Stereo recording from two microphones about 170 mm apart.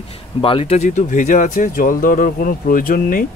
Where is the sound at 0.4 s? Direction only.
30° left (ahead or behind).